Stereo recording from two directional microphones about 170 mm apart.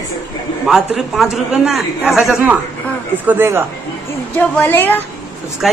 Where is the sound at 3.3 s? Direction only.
15° right (ahead or behind).